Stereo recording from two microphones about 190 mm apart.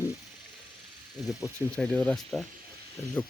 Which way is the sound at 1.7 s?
5° left (ahead or behind).